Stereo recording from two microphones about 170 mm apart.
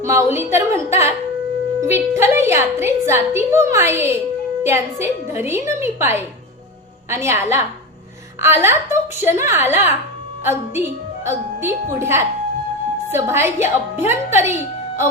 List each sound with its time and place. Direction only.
0.0 s a woman's voice: 15° right (ahead or behind)